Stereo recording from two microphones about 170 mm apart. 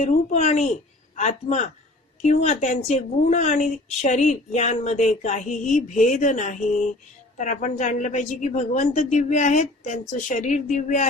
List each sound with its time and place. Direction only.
0.0 s a woman's voice: 40° left (ahead or behind)